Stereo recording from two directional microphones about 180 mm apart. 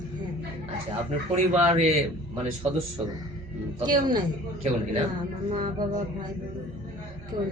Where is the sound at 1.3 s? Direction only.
40° right (ahead or behind).